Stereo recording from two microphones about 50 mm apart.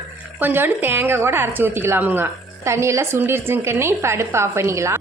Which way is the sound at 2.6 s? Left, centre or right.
Right.